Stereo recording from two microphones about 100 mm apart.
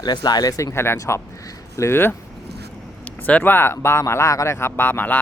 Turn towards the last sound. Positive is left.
turn(degrees=20)  # may be behind; listen again after turning